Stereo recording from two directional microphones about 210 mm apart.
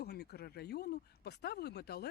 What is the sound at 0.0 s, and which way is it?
Speech, 50° left (ahead or behind).